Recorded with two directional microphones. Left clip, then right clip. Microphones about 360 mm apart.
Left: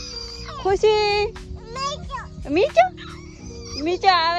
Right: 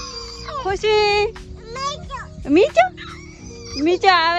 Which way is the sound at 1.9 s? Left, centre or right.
Centre.